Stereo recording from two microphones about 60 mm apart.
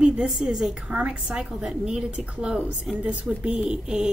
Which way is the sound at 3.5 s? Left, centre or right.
Centre.